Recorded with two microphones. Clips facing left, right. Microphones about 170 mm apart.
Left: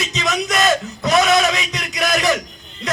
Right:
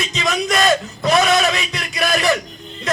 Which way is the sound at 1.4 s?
20° left (ahead or behind).